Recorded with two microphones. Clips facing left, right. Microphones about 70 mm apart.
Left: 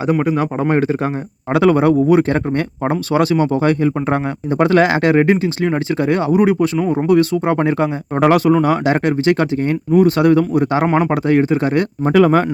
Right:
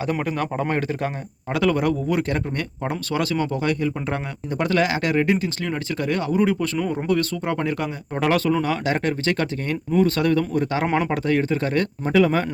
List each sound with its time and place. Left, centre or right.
0.1 s speech: centre
12.0 s speech: left